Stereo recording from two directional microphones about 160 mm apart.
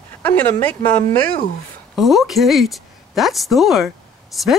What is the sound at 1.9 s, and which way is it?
Speech, centre (ahead or behind).